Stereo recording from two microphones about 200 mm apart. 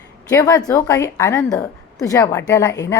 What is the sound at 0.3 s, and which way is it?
A woman's voice, 20° left (ahead or behind).